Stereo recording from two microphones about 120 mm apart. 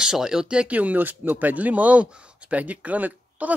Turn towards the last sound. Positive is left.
turn(degrees=-10)  # may be behind; listen again after turning